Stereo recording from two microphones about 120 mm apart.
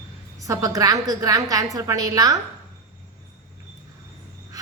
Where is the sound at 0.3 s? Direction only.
25° right (ahead or behind).